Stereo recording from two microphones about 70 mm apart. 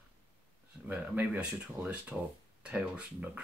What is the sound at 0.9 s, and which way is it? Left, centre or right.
Speech, right.